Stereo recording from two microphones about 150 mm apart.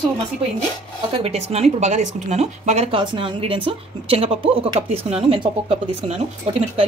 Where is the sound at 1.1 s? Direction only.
45° right (ahead or behind).